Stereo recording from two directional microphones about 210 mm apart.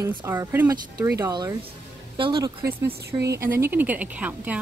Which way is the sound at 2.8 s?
50° right (ahead or behind).